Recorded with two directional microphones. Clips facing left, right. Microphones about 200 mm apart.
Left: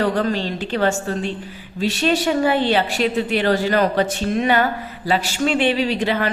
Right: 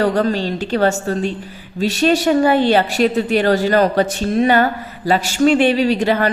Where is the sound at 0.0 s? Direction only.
40° right (ahead or behind).